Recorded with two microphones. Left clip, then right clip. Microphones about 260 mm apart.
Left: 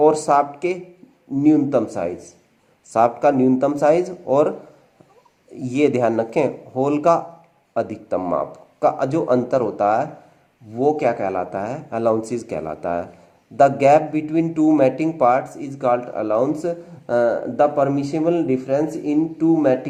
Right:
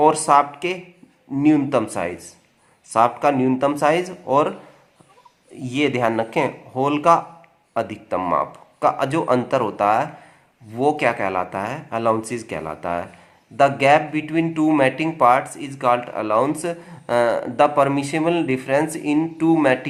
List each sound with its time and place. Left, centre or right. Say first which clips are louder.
0.0 s speech: even; right
5.5 s speech: left 3 dB; right